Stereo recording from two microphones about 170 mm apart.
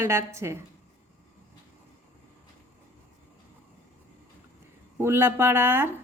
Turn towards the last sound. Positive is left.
turn(degrees=-15)  # may be behind; listen again after turning